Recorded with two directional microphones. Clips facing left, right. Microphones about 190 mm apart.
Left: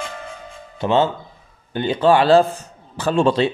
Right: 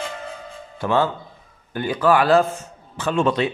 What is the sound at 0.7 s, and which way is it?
A man's voice, 20° left (ahead or behind).